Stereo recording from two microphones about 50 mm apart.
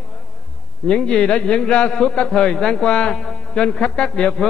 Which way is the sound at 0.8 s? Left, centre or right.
Centre.